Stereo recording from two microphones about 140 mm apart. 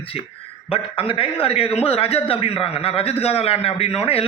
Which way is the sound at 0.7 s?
40° left (ahead or behind).